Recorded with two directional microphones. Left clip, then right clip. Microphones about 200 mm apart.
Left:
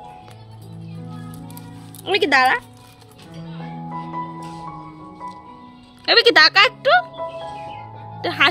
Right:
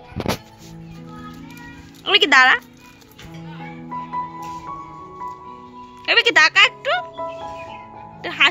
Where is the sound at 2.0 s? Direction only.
10° left (ahead or behind).